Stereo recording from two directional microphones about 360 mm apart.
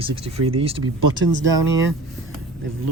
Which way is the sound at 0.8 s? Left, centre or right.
Right.